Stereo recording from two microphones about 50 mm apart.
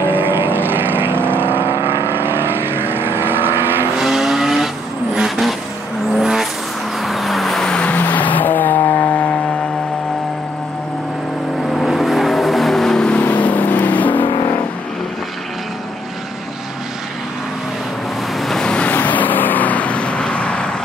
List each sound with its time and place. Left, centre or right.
0.0 s vehicle: right
4.0 s vehicle: centre
7.7 s vehicle: left
8.0 s vehicle: left
9.0 s chainsaw: left
11.8 s vehicle: centre
13.2 s vehicle: left
18.4 s vehicle: centre
18.7 s vehicle: left
18.9 s vehicle: left